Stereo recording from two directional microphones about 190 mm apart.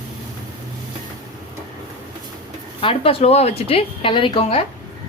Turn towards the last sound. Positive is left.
turn(degrees=30)  # may be behind; listen again after turning